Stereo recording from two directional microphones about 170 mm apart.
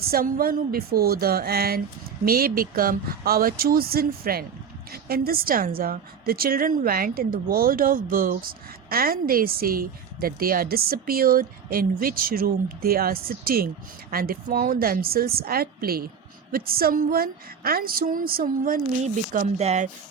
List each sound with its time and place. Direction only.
0.1 s a woman's voice: 60° right (ahead or behind); by 19.9 s 40° right (ahead or behind)